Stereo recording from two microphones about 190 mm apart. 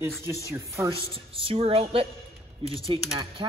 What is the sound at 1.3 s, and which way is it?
Speech, 30° right (ahead or behind).